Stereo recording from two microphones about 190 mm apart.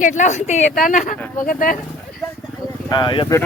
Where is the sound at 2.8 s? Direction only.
20° left (ahead or behind).